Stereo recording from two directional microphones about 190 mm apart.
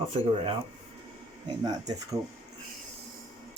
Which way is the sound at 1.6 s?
20° right (ahead or behind).